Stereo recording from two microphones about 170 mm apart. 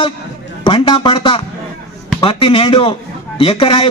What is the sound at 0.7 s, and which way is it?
A man's voice, 30° left (ahead or behind).